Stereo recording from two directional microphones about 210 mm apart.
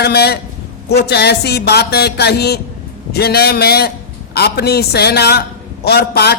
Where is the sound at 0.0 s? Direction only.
50° left (ahead or behind).